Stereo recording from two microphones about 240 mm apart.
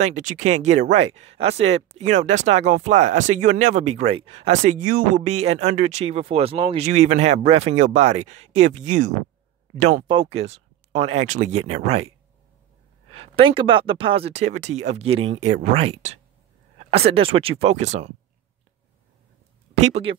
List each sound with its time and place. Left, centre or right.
0.0 s speech: right
13.1 s speech: right
19.8 s speech: right